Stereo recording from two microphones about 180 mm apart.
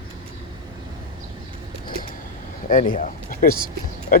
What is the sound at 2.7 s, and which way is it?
Speech, 45° left (ahead or behind).